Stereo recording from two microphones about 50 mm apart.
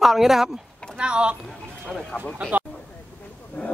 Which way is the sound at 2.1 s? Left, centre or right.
Left.